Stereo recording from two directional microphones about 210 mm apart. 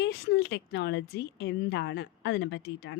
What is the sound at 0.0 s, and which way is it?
A woman's voice, 50° left (ahead or behind).